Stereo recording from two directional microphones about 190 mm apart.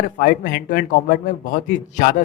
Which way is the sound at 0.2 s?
50° left (ahead or behind).